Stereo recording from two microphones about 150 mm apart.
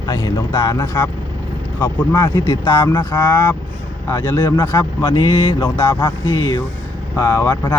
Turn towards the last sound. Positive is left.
turn(degrees=25)  # may be behind; listen again after turning